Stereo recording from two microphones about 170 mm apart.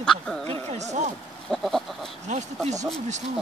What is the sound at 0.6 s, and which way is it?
Speech, 40° right (ahead or behind).